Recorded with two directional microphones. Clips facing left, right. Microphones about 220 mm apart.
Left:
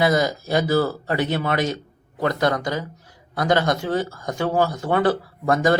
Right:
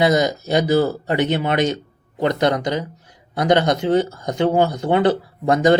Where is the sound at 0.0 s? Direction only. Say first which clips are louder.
Right 3 dB; 20° right (ahead or behind).